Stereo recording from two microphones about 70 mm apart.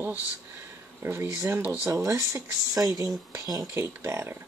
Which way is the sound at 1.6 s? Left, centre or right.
Right.